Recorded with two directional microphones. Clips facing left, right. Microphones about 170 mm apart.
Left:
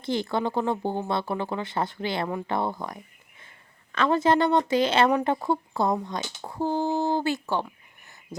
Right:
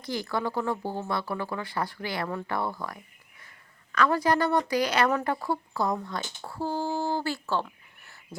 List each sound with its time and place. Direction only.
0.0 s speech: 25° left (ahead or behind)